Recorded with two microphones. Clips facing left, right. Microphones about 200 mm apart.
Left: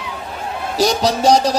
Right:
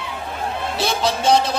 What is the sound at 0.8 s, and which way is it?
Speech, 40° left (ahead or behind).